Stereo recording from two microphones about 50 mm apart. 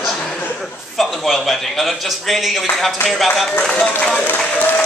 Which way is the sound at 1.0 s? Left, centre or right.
Centre.